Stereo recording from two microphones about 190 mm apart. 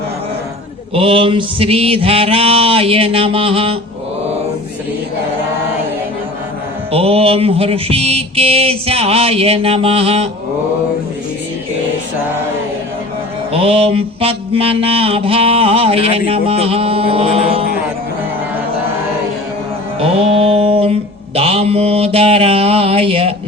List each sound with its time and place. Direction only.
0.9 s mantra: 25° right (ahead or behind)
6.9 s mantra: 30° right (ahead or behind)
13.5 s mantra: 30° right (ahead or behind)
20.0 s mantra: 30° right (ahead or behind)